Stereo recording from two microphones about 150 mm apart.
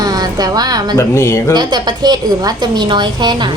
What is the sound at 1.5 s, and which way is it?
A woman's voice, 30° right (ahead or behind).